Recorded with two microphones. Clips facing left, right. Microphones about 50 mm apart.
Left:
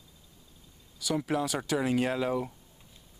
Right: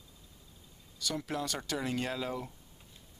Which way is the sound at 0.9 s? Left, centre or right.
Centre.